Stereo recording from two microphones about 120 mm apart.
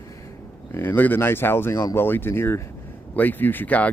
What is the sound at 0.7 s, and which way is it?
Speech, 20° left (ahead or behind).